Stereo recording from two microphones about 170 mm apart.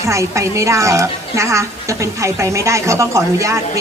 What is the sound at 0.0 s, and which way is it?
A woman's voice, 15° right (ahead or behind).